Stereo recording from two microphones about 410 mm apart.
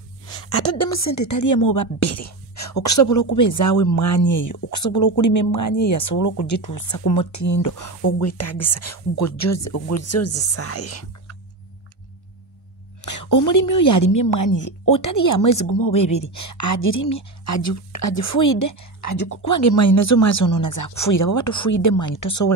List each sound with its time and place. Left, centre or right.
0.3 s a woman's voice: left
13.0 s speech: left
15.9 s speech: centre
16.3 s speech: left